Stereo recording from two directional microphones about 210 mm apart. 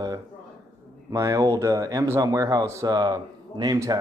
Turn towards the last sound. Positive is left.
turn(degrees=-15)  # may be behind; listen again after turning